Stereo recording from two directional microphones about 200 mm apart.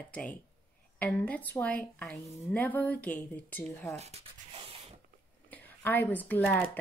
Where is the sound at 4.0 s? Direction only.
30° right (ahead or behind).